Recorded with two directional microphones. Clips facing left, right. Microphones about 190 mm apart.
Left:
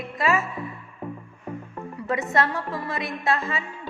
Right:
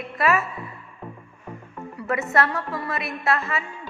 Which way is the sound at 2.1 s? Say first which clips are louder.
Right 1 dB; 20° left (ahead or behind).